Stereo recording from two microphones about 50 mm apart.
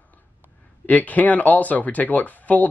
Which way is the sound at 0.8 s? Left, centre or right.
Left.